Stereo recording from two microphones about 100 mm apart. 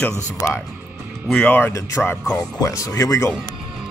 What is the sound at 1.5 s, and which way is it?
Speech, 20° left (ahead or behind).